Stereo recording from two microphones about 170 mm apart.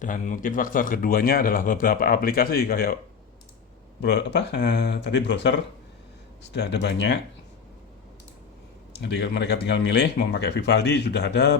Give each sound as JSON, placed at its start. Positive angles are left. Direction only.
{"t": 0.0, "sound": "a man's voice", "side_deg": 50}
{"t": 4.0, "sound": "speech", "side_deg": 90}
{"t": 9.0, "sound": "speech", "side_deg": 90}